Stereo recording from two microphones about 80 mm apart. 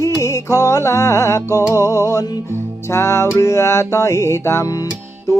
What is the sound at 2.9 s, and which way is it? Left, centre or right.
Speech, left.